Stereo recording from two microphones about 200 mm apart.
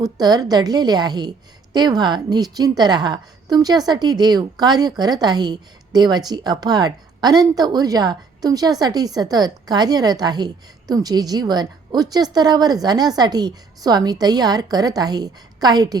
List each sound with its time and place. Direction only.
0.0 s a woman's voice: 20° right (ahead or behind)